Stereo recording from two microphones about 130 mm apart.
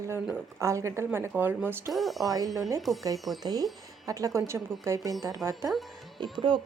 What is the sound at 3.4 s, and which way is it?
A woman's voice, 30° right (ahead or behind).